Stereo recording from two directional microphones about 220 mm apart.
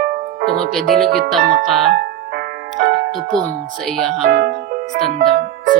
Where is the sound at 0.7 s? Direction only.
Centre (ahead or behind).